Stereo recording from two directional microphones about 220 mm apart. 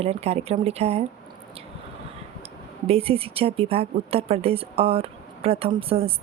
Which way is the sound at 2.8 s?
25° right (ahead or behind).